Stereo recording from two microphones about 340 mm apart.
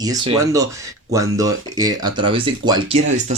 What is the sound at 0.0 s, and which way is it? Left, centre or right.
Speech, centre.